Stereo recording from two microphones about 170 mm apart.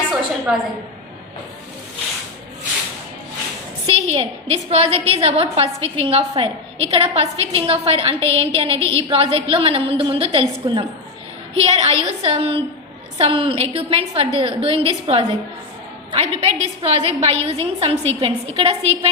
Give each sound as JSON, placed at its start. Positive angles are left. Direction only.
{"t": 0.5, "sound": "a woman's voice", "side_deg": 0}
{"t": 3.8, "sound": "a woman's voice", "side_deg": -35}